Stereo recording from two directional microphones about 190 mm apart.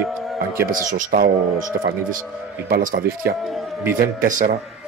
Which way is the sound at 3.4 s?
Centre (ahead or behind).